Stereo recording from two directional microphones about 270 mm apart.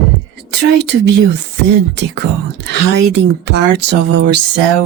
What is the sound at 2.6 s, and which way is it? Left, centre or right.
Speech, right.